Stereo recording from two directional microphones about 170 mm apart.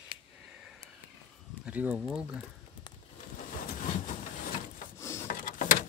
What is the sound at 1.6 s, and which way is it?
Speech, 5° right (ahead or behind).